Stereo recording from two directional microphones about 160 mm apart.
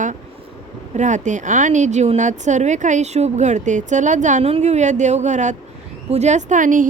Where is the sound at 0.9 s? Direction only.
50° right (ahead or behind).